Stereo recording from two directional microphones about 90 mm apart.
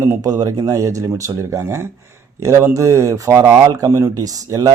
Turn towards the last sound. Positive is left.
turn(degrees=-40)  # may be behind; listen again after turning